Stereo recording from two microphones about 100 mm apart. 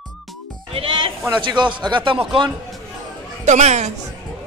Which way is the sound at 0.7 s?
65° right (ahead or behind).